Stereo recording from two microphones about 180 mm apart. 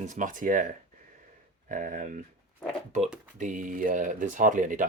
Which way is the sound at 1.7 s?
50° right (ahead or behind).